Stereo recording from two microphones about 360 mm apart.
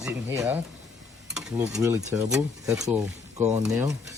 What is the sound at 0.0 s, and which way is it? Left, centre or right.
Speech, centre.